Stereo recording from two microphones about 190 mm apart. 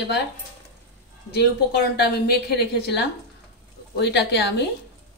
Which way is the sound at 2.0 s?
60° left (ahead or behind).